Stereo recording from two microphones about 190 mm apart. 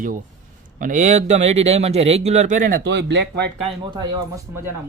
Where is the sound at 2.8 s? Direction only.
65° right (ahead or behind).